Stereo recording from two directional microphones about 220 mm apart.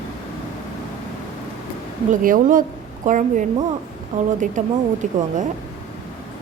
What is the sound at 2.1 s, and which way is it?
A woman's voice, 35° right (ahead or behind).